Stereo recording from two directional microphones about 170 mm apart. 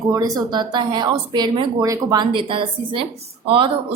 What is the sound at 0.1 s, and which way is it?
A woman's voice, 20° right (ahead or behind).